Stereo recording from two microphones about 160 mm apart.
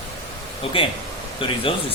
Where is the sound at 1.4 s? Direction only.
35° left (ahead or behind).